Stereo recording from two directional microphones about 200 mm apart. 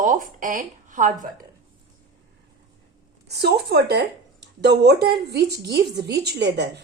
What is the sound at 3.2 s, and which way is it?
A woman's voice, 55° right (ahead or behind).